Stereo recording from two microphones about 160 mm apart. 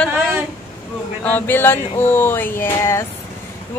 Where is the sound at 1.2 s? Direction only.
10° left (ahead or behind).